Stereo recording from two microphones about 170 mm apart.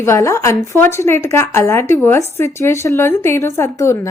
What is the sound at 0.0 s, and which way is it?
Speech, 15° left (ahead or behind).